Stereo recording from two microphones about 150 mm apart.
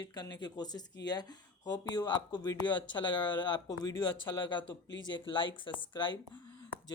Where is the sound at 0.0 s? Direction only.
30° left (ahead or behind).